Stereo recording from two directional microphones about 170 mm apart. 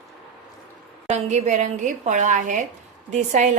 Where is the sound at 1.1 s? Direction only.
45° right (ahead or behind).